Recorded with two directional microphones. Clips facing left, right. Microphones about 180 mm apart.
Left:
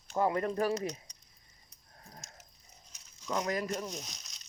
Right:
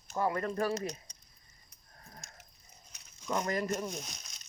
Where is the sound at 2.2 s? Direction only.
60° right (ahead or behind).